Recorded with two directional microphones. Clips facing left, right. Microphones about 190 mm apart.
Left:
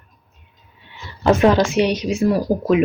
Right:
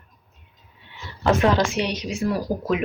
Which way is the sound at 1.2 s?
10° left (ahead or behind).